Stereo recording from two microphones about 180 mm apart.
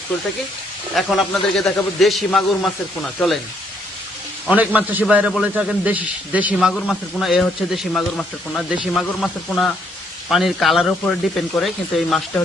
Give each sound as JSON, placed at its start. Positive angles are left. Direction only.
{"t": 0.9, "sound": "a man's voice", "side_deg": 0}
{"t": 4.4, "sound": "a man's voice", "side_deg": -5}